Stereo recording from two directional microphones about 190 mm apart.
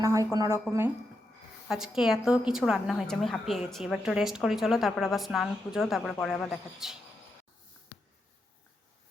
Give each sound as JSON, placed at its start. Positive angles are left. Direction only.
{"t": 0.0, "sound": "a woman's voice", "side_deg": -15}
{"t": 1.6, "sound": "a woman's voice", "side_deg": 0}